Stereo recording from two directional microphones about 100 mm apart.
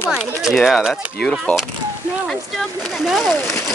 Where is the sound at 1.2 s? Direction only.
5° left (ahead or behind).